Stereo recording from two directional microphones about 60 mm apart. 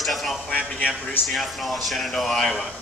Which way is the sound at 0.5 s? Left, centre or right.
Left.